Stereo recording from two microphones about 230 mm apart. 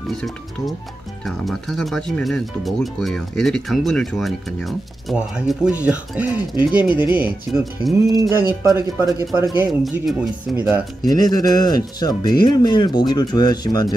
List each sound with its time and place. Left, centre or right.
0.1 s speech: centre
7.5 s speech: centre
9.6 s speech: centre
10.5 s speech: centre
11.1 s speech: centre